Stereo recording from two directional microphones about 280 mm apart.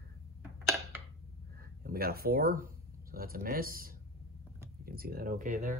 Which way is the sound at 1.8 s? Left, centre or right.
Right.